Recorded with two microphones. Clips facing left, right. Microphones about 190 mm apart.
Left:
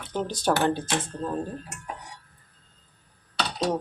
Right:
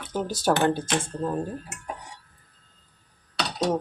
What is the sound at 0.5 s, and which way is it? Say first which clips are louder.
Speech: right 2 dB; 20° right (ahead or behind).